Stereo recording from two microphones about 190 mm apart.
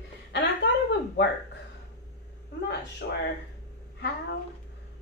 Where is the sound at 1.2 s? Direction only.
65° left (ahead or behind).